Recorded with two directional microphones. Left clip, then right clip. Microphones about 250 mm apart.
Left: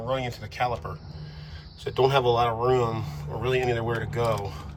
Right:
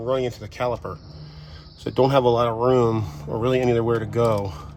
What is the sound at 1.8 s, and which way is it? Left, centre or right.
Speech, right.